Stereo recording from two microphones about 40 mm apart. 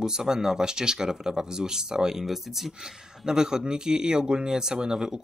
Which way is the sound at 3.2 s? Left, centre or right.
Centre.